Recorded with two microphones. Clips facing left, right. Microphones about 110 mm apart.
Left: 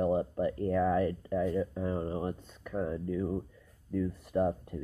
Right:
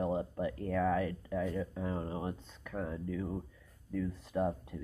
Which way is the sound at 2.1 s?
10° right (ahead or behind).